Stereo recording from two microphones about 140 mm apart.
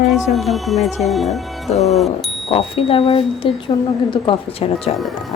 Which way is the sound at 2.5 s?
40° left (ahead or behind).